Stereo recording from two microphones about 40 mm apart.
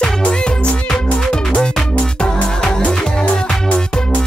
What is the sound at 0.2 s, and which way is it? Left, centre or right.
Music, left.